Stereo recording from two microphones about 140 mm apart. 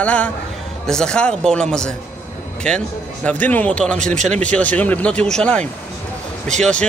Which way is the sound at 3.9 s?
60° right (ahead or behind).